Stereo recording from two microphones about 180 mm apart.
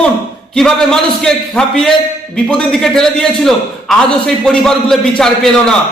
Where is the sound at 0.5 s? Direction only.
5° left (ahead or behind).